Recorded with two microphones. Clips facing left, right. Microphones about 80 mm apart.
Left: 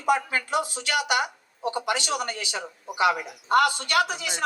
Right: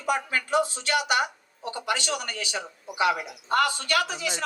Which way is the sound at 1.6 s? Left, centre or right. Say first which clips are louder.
Left 2 dB; left.